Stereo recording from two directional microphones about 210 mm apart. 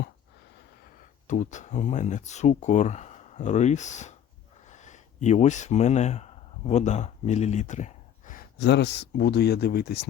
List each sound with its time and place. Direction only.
1.3 s speech: 35° left (ahead or behind)